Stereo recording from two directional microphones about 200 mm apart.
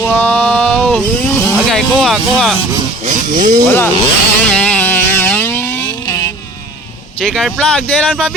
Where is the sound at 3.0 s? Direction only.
40° right (ahead or behind).